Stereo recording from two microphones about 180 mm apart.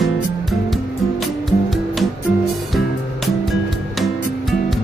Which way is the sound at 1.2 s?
Centre (ahead or behind).